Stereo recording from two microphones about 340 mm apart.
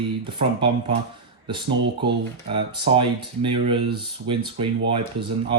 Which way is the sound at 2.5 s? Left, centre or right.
Centre.